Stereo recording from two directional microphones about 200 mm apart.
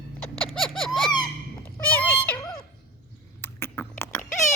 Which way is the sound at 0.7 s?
Centre (ahead or behind).